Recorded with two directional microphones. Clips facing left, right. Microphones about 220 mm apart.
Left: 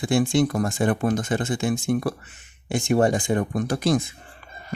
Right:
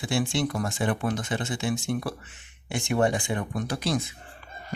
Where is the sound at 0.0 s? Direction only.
45° left (ahead or behind).